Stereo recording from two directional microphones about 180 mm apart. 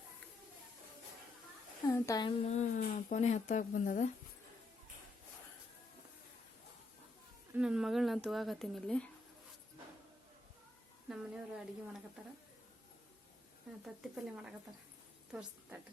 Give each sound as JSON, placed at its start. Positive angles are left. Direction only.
{"t": 1.9, "sound": "a woman's voice", "side_deg": 20}
{"t": 2.4, "sound": "speech", "side_deg": 40}
{"t": 7.5, "sound": "speech", "side_deg": -5}
{"t": 11.1, "sound": "speech", "side_deg": -5}
{"t": 13.8, "sound": "speech", "side_deg": -5}